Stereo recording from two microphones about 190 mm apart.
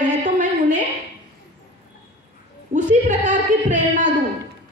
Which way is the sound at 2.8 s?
40° right (ahead or behind).